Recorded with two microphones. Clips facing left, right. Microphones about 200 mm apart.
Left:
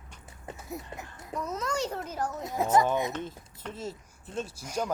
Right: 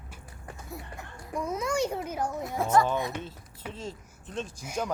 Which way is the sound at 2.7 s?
20° left (ahead or behind).